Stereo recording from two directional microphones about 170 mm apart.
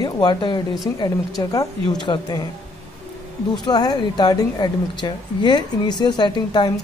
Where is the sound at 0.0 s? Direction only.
25° left (ahead or behind).